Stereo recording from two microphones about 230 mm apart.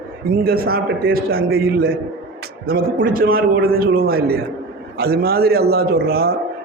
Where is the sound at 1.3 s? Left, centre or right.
Right.